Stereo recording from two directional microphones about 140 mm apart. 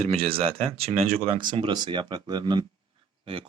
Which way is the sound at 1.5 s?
35° right (ahead or behind).